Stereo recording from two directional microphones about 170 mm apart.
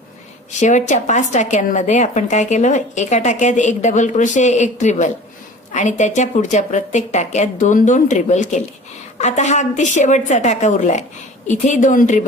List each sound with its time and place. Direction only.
0.6 s a woman's voice: 45° left (ahead or behind)